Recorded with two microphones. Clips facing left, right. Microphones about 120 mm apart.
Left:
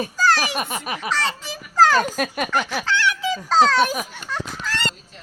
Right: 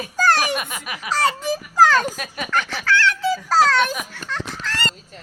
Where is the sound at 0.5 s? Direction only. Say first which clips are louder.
Left 1 dB; 35° left (ahead or behind).